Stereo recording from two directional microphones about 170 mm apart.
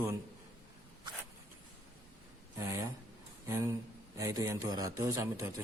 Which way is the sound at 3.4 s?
15° right (ahead or behind).